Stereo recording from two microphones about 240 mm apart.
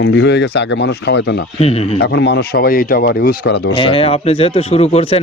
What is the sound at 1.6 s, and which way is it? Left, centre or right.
Speech, left.